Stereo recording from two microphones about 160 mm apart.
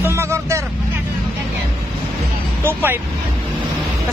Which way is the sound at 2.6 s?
15° right (ahead or behind).